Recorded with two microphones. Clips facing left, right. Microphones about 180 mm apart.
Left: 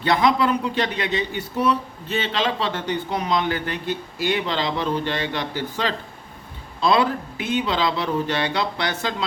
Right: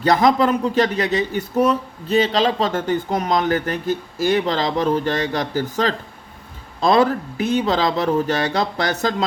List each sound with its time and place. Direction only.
0.0 s speech: 45° right (ahead or behind)